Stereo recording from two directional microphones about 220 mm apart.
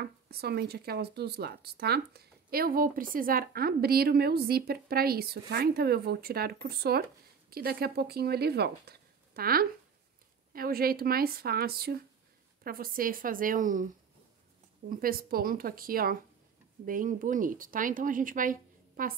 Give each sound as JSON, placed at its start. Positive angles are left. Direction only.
{"t": 0.0, "sound": "speech", "side_deg": -45}
{"t": 14.9, "sound": "speech", "side_deg": -40}